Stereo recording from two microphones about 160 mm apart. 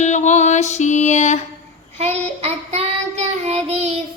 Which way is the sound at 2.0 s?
40° right (ahead or behind).